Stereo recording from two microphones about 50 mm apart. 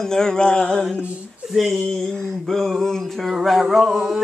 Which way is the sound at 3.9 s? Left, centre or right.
Centre.